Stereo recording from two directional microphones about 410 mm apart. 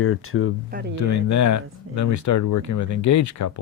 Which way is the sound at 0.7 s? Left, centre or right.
Right.